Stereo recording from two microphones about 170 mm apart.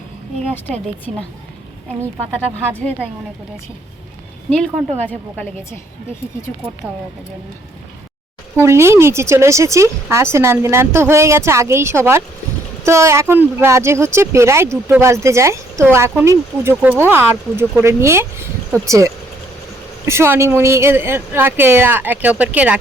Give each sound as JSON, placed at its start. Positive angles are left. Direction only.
{"t": 4.4, "sound": "a woman's voice", "side_deg": 5}
{"t": 8.5, "sound": "speech", "side_deg": -15}